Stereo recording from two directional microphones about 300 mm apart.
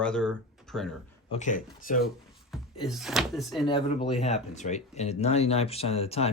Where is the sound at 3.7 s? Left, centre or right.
Centre.